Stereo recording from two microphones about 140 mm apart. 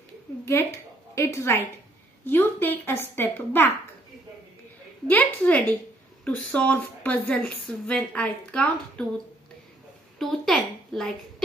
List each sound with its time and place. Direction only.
1.1 s a woman's voice: 20° left (ahead or behind)
5.0 s speech: 10° left (ahead or behind)
10.1 s a woman's voice: centre (ahead or behind)